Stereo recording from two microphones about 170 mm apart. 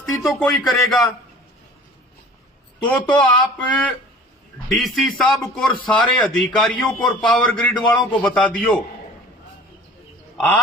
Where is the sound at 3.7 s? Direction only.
5° left (ahead or behind).